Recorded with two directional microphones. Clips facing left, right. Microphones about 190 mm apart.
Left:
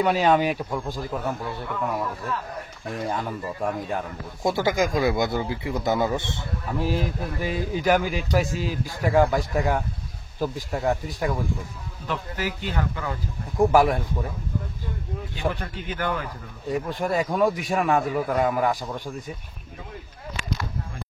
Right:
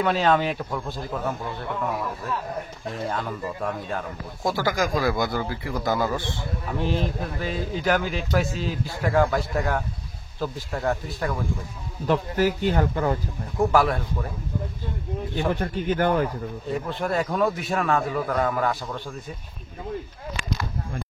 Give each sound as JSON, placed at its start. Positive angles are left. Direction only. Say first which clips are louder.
{"t": 0.0, "sound": "speech", "louder": "left 1 dB", "side_deg": 15}
{"t": 2.9, "sound": "a man's voice", "louder": "left 1 dB", "side_deg": 15}
{"t": 6.8, "sound": "speech", "louder": "even", "side_deg": 5}
{"t": 12.1, "sound": "speech", "louder": "right 8 dB", "side_deg": -45}
{"t": 13.6, "sound": "speech", "louder": "left 2 dB", "side_deg": 15}
{"t": 15.3, "sound": "speech", "louder": "right 4 dB", "side_deg": -50}
{"t": 16.7, "sound": "speech", "louder": "left 1 dB", "side_deg": 10}